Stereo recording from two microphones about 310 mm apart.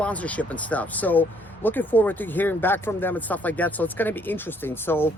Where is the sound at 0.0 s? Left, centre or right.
Centre.